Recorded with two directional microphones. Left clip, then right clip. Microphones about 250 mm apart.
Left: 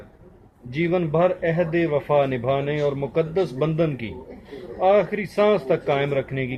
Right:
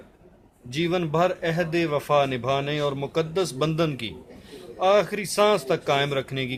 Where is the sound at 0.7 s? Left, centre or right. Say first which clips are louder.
Left 2 dB; right.